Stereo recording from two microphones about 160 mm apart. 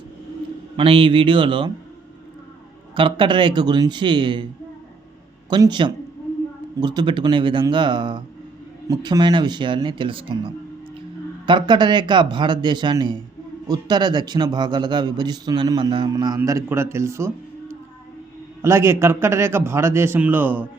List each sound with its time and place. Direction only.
0.8 s speech: 35° right (ahead or behind)
2.9 s a man's voice: 30° right (ahead or behind)
5.5 s a man's voice: 25° right (ahead or behind)